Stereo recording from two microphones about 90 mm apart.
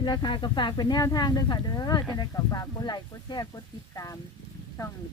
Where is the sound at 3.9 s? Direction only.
40° left (ahead or behind).